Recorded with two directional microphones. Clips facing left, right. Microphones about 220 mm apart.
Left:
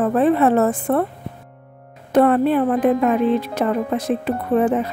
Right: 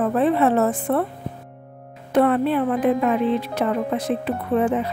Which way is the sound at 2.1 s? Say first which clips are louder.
Left 3 dB; 45° left (ahead or behind).